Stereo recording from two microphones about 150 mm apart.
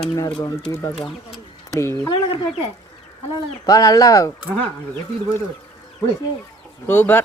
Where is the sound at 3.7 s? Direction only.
25° left (ahead or behind).